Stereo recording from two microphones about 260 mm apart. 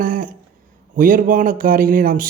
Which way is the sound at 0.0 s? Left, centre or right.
Right.